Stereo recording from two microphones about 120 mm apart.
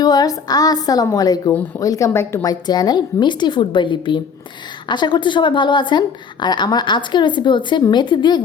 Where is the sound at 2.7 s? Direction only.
35° left (ahead or behind).